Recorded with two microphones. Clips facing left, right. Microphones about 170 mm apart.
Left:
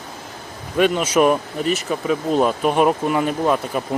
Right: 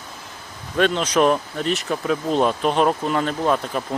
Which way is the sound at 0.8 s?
10° left (ahead or behind).